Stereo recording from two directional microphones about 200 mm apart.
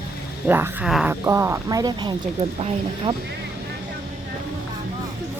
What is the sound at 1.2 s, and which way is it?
Speech, 15° right (ahead or behind).